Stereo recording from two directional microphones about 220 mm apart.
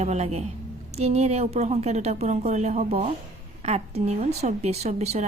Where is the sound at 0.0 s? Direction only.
30° right (ahead or behind).